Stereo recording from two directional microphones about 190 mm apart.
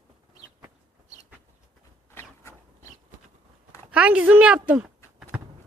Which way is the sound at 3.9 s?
5° right (ahead or behind).